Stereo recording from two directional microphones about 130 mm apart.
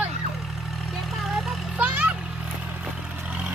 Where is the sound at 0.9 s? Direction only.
Centre (ahead or behind).